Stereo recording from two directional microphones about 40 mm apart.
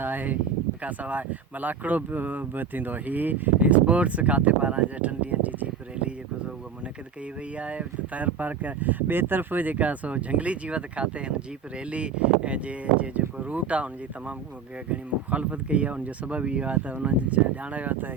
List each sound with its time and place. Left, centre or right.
0.0 s speech: right
0.8 s speech: right
7.6 s speech: right